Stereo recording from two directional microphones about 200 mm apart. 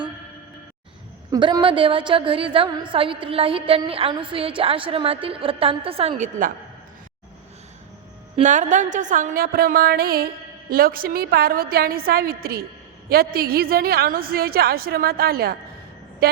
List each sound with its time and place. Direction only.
1.3 s a woman's voice: 20° right (ahead or behind); by 6.5 s 35° right (ahead or behind)
8.4 s a woman's voice: 40° right (ahead or behind)
16.2 s vehicle: 50° right (ahead or behind)